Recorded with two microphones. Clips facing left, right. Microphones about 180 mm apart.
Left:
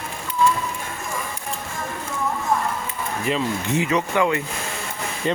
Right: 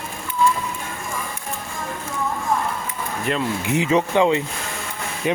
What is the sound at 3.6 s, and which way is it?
Speech, 20° right (ahead or behind).